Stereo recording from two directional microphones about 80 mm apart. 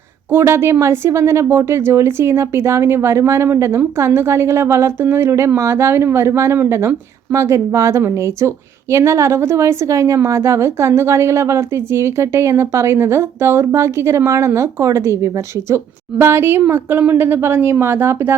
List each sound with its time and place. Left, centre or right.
0.3 s a woman's voice: right